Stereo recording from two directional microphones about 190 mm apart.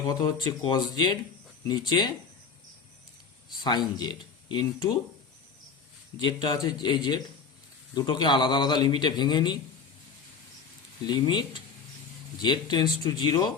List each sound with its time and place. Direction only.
0.1 s a man's voice: 25° left (ahead or behind)
3.5 s a man's voice: 20° left (ahead or behind)
6.1 s a man's voice: 25° left (ahead or behind)
11.0 s a man's voice: 25° left (ahead or behind)